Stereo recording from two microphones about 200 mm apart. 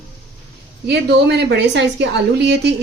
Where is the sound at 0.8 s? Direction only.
55° right (ahead or behind).